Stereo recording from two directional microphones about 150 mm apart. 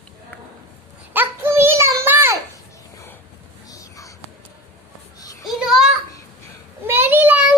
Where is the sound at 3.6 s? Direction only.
20° left (ahead or behind).